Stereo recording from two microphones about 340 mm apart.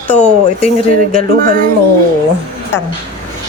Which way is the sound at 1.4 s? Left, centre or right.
Right.